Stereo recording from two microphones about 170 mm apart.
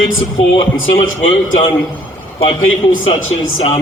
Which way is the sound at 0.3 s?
35° left (ahead or behind).